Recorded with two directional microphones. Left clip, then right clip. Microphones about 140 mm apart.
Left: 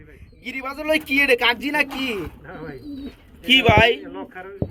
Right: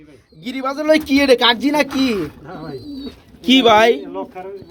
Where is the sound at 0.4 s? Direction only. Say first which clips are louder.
Right 7 dB; 20° right (ahead or behind).